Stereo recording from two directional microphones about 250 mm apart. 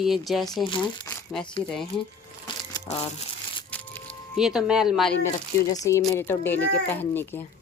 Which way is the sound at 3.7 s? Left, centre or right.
Centre.